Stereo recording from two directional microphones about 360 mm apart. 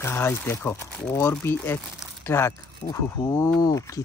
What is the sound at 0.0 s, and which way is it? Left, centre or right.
Speech, centre.